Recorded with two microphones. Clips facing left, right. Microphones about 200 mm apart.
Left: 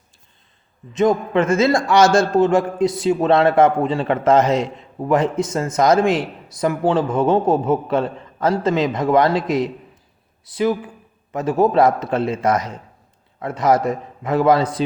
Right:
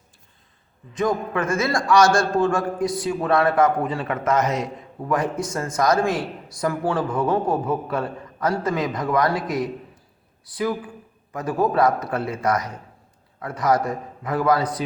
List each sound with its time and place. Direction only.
0.9 s a man's voice: 25° left (ahead or behind)